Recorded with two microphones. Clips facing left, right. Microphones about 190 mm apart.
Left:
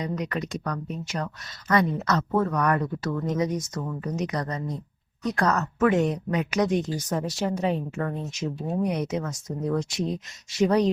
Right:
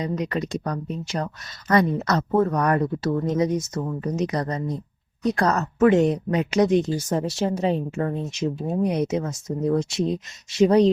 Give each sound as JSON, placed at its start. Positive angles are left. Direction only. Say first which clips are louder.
{"t": 0.0, "sound": "a woman's voice", "louder": "right 3 dB", "side_deg": -30}